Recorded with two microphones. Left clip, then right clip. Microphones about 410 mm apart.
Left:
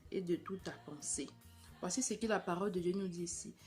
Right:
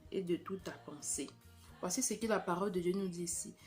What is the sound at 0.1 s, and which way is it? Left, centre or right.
Speech, left.